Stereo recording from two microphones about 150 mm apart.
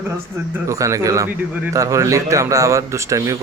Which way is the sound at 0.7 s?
20° right (ahead or behind).